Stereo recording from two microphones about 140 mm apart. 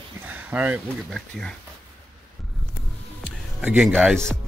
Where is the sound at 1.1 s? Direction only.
5° left (ahead or behind).